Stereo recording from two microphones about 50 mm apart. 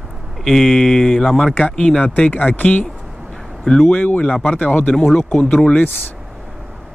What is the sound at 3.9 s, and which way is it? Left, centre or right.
Speech, left.